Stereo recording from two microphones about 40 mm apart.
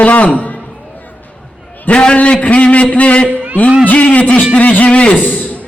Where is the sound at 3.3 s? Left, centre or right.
Right.